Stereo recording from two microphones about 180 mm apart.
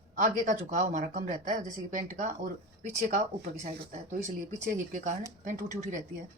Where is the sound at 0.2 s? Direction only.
45° right (ahead or behind).